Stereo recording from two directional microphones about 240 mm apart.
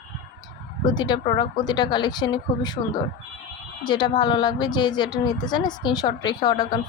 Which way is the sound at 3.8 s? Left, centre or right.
Centre.